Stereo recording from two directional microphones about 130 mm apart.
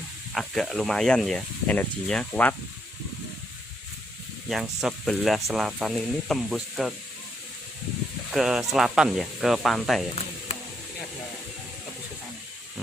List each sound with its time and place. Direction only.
0.3 s speech: centre (ahead or behind)
4.8 s speech: centre (ahead or behind)
8.3 s speech: 5° right (ahead or behind)